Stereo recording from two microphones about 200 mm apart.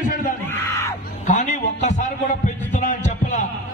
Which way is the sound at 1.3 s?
35° left (ahead or behind).